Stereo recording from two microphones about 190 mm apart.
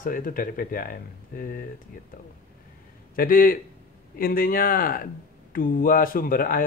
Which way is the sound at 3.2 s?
50° left (ahead or behind).